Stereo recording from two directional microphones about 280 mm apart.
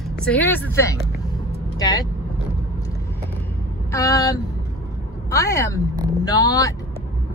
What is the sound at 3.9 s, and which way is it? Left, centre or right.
A woman's voice, centre.